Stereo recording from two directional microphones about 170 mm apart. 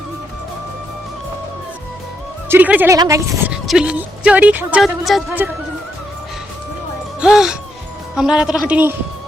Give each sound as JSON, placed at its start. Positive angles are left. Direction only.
{"t": 2.5, "sound": "speech", "side_deg": -10}
{"t": 3.5, "sound": "speech", "side_deg": -5}
{"t": 7.2, "sound": "a woman's voice", "side_deg": -5}